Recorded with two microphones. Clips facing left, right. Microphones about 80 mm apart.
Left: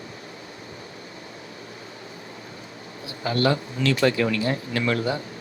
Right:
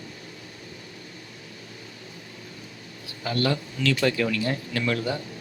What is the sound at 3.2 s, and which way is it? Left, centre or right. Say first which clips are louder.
Speech: left 3 dB; left.